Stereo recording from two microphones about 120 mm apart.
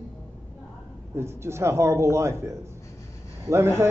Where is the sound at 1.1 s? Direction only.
20° right (ahead or behind).